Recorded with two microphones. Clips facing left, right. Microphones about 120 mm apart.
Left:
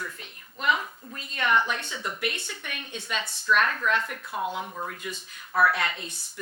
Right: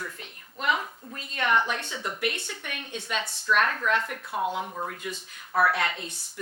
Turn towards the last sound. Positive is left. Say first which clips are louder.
# even
turn(degrees=-50)  # may be behind; listen again after turning